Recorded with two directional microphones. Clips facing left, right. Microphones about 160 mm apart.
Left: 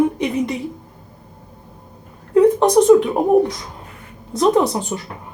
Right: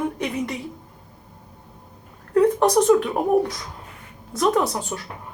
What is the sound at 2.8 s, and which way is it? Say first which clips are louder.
A woman's voice: left 6 dB; 15° left (ahead or behind).